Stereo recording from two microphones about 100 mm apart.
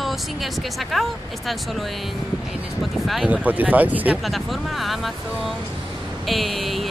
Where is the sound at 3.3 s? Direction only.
15° right (ahead or behind).